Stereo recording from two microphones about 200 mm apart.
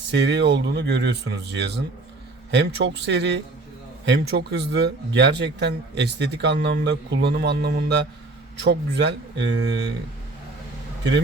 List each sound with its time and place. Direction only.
0.1 s speech: 60° right (ahead or behind)